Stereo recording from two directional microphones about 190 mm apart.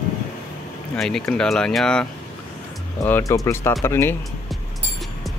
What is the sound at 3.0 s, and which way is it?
Speech, 15° left (ahead or behind).